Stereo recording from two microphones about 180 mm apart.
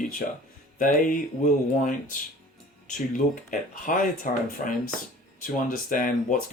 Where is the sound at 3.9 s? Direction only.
50° left (ahead or behind).